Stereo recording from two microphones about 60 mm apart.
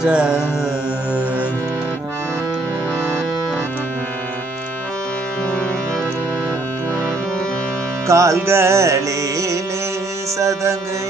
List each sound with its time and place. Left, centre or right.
0.0 s carnatic music: centre
8.1 s music: right
8.4 s carnatic music: right
10.4 s music: right